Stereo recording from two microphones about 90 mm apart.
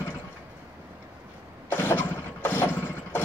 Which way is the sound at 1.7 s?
25° left (ahead or behind).